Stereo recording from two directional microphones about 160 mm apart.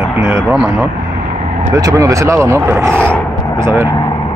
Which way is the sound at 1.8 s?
20° right (ahead or behind).